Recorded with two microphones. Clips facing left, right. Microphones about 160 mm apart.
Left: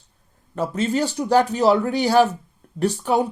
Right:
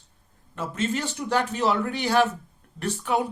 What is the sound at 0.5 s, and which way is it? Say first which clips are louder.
Speech: left 6 dB; 35° left (ahead or behind).